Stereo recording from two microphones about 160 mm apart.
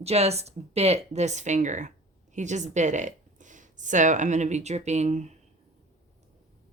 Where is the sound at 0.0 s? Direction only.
40° right (ahead or behind).